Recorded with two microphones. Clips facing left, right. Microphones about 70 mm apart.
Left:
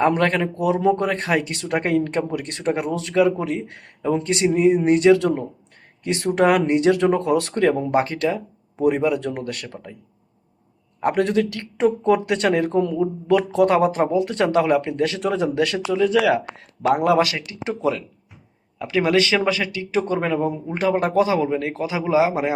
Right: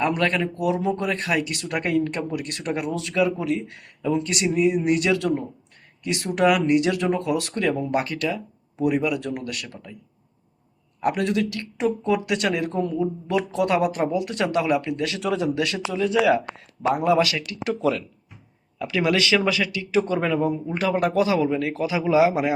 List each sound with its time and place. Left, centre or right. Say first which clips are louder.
0.0 s speech: left 4 dB; left
0.6 s speech: left 6 dB; left
11.0 s speech: left 3 dB; left
13.0 s speech: left 5 dB; left
13.7 s speech: left 4 dB; left
16.8 s speech: left 3 dB; left
17.3 s speech: right 1 dB; left